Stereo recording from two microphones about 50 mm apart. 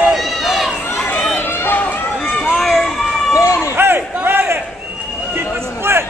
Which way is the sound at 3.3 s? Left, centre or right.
Left.